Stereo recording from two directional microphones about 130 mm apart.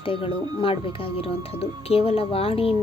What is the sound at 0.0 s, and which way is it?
Speech, 45° left (ahead or behind).